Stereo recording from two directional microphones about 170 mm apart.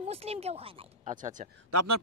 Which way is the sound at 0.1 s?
35° right (ahead or behind).